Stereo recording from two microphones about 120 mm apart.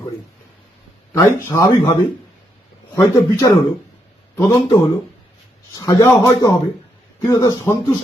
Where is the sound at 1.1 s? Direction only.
25° left (ahead or behind).